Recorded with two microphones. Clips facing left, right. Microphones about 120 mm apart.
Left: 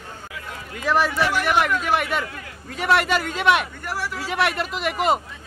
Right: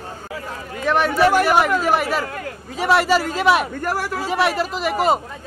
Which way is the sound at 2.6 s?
Centre (ahead or behind).